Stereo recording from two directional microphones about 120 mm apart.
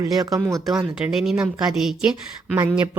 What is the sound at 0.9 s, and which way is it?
Speech, 5° right (ahead or behind).